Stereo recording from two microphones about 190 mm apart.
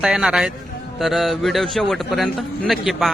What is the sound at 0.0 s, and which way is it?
A man's voice, 5° right (ahead or behind).